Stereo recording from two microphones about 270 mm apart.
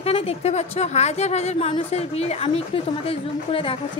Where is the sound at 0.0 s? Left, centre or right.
Left.